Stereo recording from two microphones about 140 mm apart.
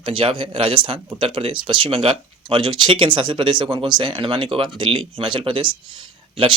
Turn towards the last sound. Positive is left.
turn(degrees=-35)  # may be behind; listen again after turning